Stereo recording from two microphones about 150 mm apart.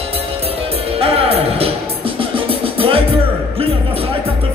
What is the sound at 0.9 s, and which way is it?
Music, 40° right (ahead or behind).